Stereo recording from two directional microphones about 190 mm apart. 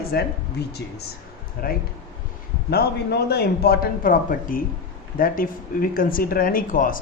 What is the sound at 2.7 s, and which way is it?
Speech, 55° left (ahead or behind).